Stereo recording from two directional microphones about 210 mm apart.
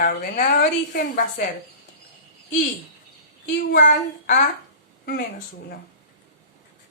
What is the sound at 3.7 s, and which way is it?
A woman's voice, 35° left (ahead or behind).